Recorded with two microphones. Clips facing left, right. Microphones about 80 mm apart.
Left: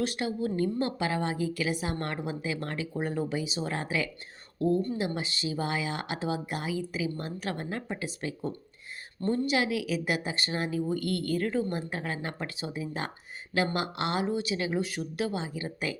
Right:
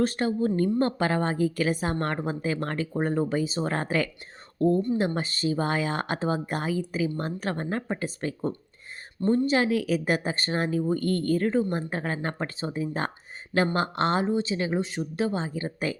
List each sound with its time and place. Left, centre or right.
0.0 s a woman's voice: right
9.2 s speech: right
9.5 s speech: right